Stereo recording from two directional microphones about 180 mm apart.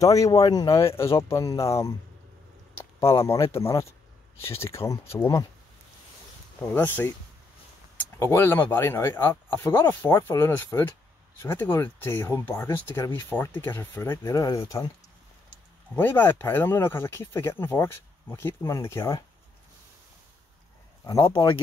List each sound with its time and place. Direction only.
0.0 s speech: 20° left (ahead or behind)
6.6 s speech: 10° left (ahead or behind)
15.9 s speech: 10° left (ahead or behind)
21.0 s speech: 25° left (ahead or behind)